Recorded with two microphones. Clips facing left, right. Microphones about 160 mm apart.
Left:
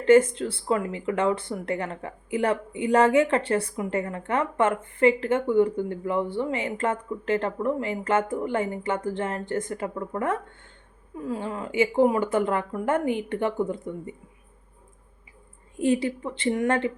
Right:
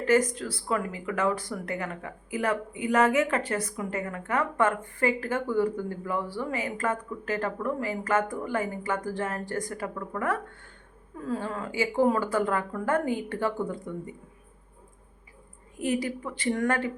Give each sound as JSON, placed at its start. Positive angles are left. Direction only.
{"t": 0.0, "sound": "speech", "side_deg": 25}
{"t": 15.8, "sound": "speech", "side_deg": 30}